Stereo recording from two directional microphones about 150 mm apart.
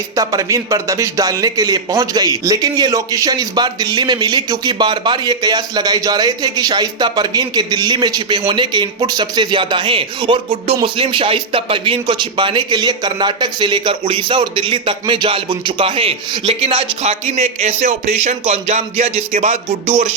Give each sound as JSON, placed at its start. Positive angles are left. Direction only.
{"t": 0.2, "sound": "a man's voice", "side_deg": -20}